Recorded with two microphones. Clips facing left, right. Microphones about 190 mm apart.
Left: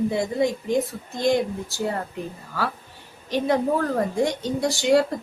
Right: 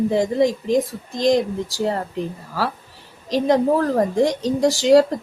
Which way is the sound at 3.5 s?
35° right (ahead or behind).